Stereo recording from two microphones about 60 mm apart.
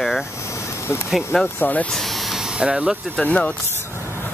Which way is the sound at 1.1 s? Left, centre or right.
Centre.